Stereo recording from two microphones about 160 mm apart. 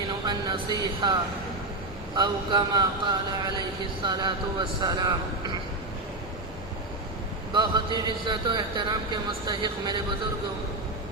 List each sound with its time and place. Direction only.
0.3 s a man's voice: 30° right (ahead or behind)
2.1 s a man's voice: 30° right (ahead or behind)
7.5 s a man's voice: 30° right (ahead or behind)